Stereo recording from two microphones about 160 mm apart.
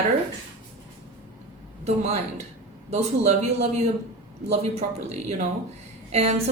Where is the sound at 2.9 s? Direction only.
45° right (ahead or behind).